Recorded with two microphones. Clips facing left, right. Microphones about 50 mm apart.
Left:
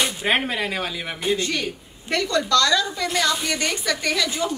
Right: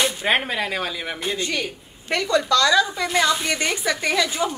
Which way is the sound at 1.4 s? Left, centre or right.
Centre.